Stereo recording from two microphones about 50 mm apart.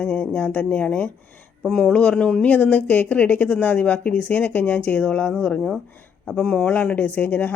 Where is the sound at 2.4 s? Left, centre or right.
Left; by 6.7 s centre.